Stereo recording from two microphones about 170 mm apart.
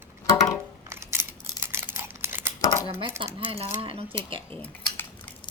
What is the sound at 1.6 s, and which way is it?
Crumpling, 15° right (ahead or behind).